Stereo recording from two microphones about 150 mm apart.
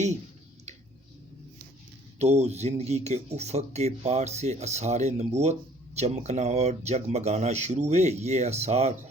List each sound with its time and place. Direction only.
2.1 s speech: 45° right (ahead or behind)